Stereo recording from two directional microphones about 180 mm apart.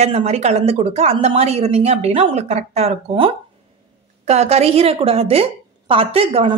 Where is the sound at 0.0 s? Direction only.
35° right (ahead or behind).